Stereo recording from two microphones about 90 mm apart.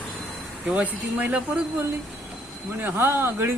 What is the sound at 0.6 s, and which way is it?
A woman's voice, 15° right (ahead or behind).